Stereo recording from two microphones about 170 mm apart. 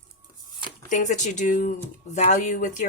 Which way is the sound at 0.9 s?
45° left (ahead or behind).